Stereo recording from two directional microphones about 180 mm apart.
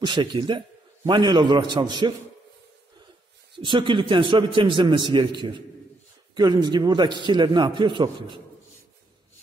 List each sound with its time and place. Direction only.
0.0 s a man's voice: 25° right (ahead or behind)
3.5 s a man's voice: 25° right (ahead or behind)